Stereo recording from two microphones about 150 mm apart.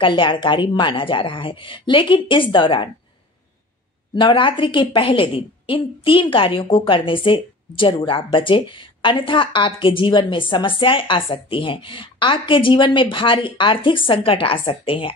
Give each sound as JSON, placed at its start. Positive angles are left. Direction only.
{"t": 0.0, "sound": "a woman's voice", "side_deg": 35}
{"t": 4.1, "sound": "a woman's voice", "side_deg": 30}